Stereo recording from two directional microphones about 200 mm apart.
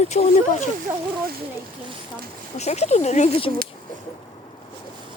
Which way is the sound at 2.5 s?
35° left (ahead or behind).